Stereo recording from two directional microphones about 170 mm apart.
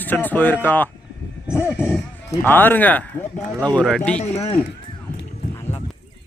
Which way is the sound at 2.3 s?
10° left (ahead or behind).